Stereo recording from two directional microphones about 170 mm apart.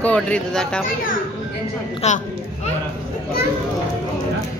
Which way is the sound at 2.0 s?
40° left (ahead or behind).